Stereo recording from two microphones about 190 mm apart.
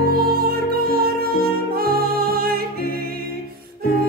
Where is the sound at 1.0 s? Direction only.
55° right (ahead or behind).